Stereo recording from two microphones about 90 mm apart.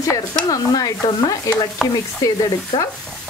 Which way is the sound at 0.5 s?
45° left (ahead or behind).